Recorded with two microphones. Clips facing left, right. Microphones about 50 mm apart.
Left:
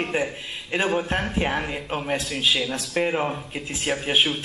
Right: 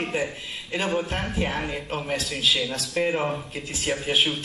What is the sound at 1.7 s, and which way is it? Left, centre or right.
Speech, centre.